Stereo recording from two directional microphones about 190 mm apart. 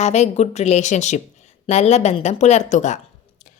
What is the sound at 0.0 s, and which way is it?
Speech, 35° left (ahead or behind).